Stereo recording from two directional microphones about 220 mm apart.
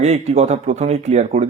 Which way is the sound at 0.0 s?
30° right (ahead or behind).